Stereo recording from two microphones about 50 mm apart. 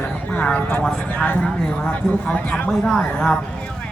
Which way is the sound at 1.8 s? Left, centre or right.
Left.